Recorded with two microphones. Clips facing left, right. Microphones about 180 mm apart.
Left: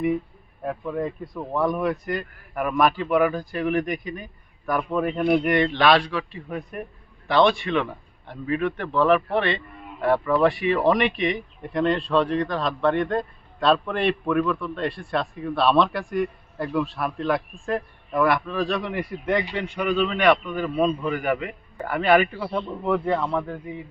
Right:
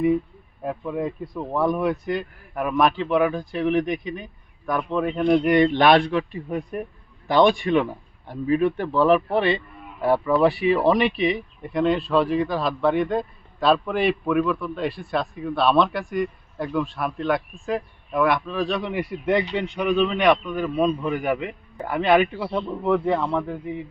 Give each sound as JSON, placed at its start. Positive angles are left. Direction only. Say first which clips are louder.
{"t": 0.6, "sound": "speech", "louder": "right 1 dB", "side_deg": -10}
{"t": 5.5, "sound": "speech", "louder": "right 5 dB", "side_deg": -15}
{"t": 7.3, "sound": "speech", "louder": "right 2 dB", "side_deg": -15}
{"t": 8.3, "sound": "a man's voice", "louder": "right 5 dB", "side_deg": -35}
{"t": 8.6, "sound": "a man's voice", "louder": "even", "side_deg": -5}
{"t": 22.2, "sound": "speech", "louder": "right 2 dB", "side_deg": -10}
{"t": 23.1, "sound": "speech", "louder": "right 1 dB", "side_deg": 0}